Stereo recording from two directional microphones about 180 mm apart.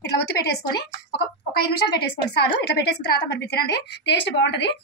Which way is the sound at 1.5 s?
60° left (ahead or behind).